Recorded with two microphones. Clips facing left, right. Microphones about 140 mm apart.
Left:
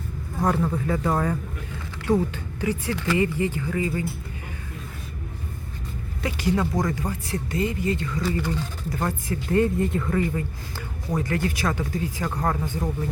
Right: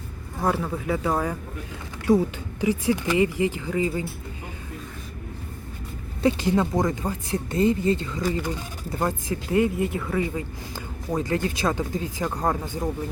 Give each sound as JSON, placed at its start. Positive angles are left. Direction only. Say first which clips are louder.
{"t": 0.4, "sound": "speech", "louder": "left 1 dB", "side_deg": -5}
{"t": 6.2, "sound": "speech", "louder": "right 3 dB", "side_deg": -25}
{"t": 8.2, "sound": "speech", "louder": "even", "side_deg": -15}
{"t": 11.1, "sound": "speech", "louder": "right 1 dB", "side_deg": -20}